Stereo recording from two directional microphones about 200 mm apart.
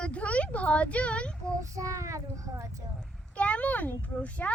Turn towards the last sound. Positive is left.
turn(degrees=5)  # may be behind; listen again after turning